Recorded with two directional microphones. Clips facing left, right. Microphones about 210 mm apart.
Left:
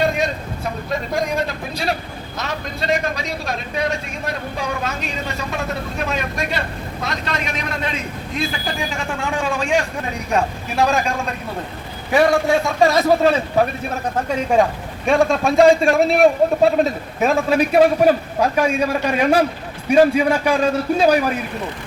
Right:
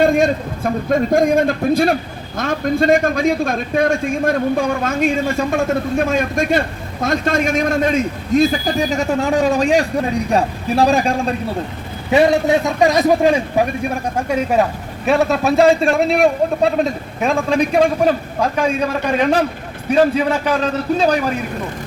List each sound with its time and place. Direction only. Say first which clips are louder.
0.0 s a man's voice: right 6 dB; 50° right (ahead or behind); by 11.1 s 35° right (ahead or behind)
12.1 s a man's voice: right 2 dB; 20° right (ahead or behind); by 21.3 s 10° left (ahead or behind)